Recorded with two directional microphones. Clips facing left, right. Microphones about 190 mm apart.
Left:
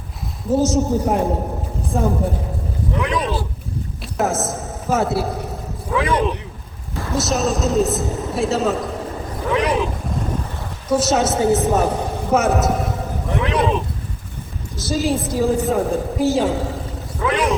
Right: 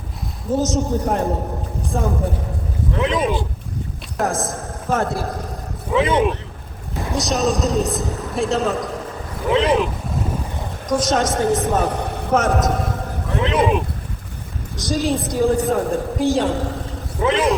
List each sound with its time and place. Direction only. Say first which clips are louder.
0.5 s a woman's voice: left 3 dB; 10° left (ahead or behind)
3.0 s speech: right 3 dB; 20° right (ahead or behind)
4.2 s a woman's voice: left 1 dB; 5° left (ahead or behind)
5.9 s vehicle: right 2 dB; 20° right (ahead or behind)
7.2 s a woman's voice: even; 5° left (ahead or behind)
9.5 s boat: right 2 dB; 25° right (ahead or behind)
10.8 s a woman's voice: left 2 dB; 10° left (ahead or behind)
13.4 s speech: right 2 dB; 20° right (ahead or behind)
14.8 s a woman's voice: even; 5° left (ahead or behind)
17.2 s a sound: right 2 dB; 25° right (ahead or behind)